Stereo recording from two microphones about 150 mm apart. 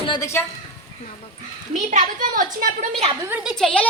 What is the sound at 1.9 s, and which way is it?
Speech, 60° right (ahead or behind).